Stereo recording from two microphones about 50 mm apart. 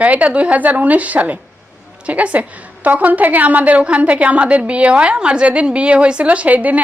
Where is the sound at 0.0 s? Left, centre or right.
Right.